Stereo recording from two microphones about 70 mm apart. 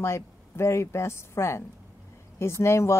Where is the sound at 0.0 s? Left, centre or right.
Left.